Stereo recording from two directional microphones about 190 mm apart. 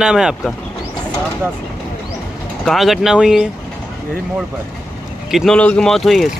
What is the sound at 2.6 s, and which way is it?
Speech, centre (ahead or behind).